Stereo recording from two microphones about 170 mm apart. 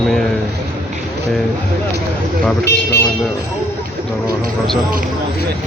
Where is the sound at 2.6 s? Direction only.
75° left (ahead or behind).